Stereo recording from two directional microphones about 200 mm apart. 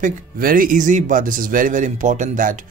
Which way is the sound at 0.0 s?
45° right (ahead or behind).